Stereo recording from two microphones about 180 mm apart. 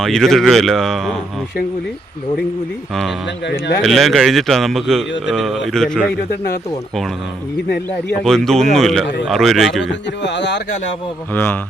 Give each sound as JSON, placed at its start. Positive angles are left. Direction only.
{"t": 0.0, "sound": "speech", "side_deg": 5}
{"t": 3.4, "sound": "speech", "side_deg": 70}
{"t": 3.8, "sound": "speech", "side_deg": 0}
{"t": 8.2, "sound": "speech", "side_deg": 5}
{"t": 9.8, "sound": "speech", "side_deg": 80}
{"t": 11.3, "sound": "speech", "side_deg": 10}